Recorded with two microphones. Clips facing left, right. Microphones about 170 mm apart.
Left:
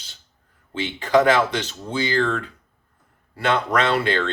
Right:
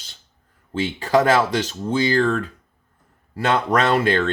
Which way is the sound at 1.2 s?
45° right (ahead or behind).